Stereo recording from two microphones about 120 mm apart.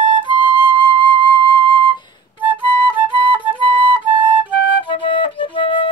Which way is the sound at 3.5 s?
45° right (ahead or behind).